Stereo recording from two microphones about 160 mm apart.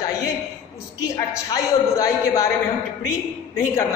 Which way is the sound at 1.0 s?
20° left (ahead or behind).